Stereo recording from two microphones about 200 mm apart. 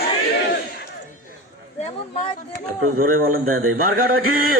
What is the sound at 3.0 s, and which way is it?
Speech, 45° right (ahead or behind).